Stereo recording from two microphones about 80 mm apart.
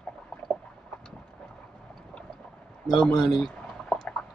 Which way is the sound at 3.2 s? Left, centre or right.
Centre.